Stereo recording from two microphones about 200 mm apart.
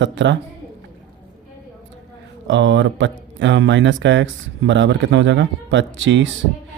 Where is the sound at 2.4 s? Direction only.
65° right (ahead or behind).